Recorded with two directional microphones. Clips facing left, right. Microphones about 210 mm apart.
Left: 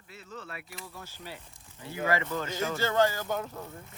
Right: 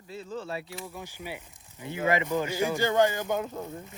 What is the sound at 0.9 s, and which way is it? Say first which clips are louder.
Speech: right 5 dB; 15° right (ahead or behind).